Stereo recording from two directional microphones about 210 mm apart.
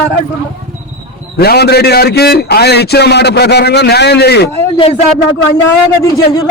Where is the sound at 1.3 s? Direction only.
50° left (ahead or behind).